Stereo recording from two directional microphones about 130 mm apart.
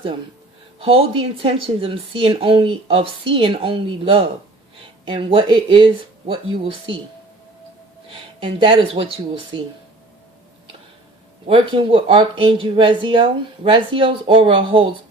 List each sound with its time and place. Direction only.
0.8 s a woman's voice: 45° right (ahead or behind)
8.1 s a woman's voice: 45° right (ahead or behind)
11.4 s speech: 45° right (ahead or behind)